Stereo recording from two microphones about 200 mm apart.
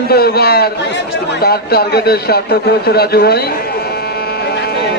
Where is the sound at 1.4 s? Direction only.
50° left (ahead or behind).